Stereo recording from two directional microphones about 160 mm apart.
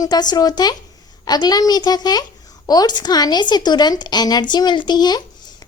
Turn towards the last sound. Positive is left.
turn(degrees=25)  # may be behind; listen again after turning